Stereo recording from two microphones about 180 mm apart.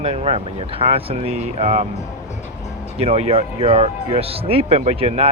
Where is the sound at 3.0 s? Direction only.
35° right (ahead or behind).